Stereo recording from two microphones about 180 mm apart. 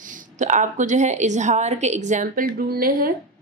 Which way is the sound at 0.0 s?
45° right (ahead or behind).